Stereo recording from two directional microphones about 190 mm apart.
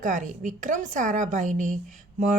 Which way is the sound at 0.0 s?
40° right (ahead or behind).